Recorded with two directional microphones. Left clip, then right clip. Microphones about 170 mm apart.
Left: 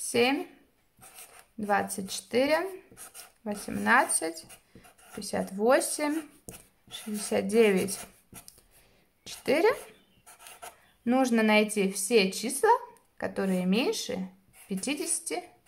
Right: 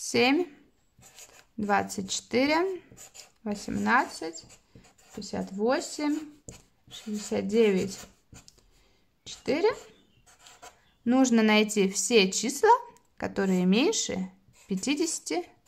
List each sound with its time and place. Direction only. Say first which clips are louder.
0.0 s speech: right 2 dB; 30° right (ahead or behind); by 8.0 s 10° right (ahead or behind)
9.2 s a sound: left 2 dB; 5° right (ahead or behind)
11.1 s a woman's voice: right 1 dB; 20° right (ahead or behind)